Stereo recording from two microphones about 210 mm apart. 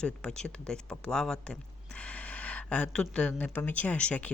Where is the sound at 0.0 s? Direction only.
5° left (ahead or behind).